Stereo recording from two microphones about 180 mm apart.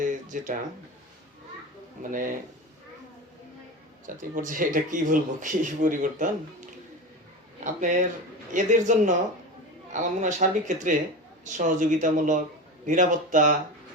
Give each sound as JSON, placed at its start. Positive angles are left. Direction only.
{"t": 0.0, "sound": "a sound", "side_deg": -45}
{"t": 2.1, "sound": "speech", "side_deg": -50}
{"t": 4.0, "sound": "speech", "side_deg": -45}
{"t": 7.6, "sound": "speech", "side_deg": -45}